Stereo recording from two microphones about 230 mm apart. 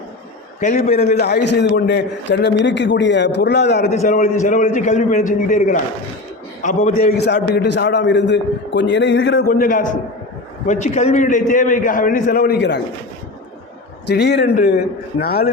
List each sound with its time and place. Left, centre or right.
0.6 s a man's voice: left
1.2 s a man's voice: left
3.8 s a man's voice: left
14.1 s a man's voice: left